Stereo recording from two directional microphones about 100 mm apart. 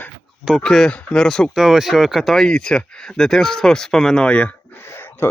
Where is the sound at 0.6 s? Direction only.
5° left (ahead or behind).